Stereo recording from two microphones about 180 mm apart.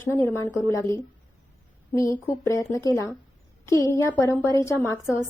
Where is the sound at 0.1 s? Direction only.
15° left (ahead or behind).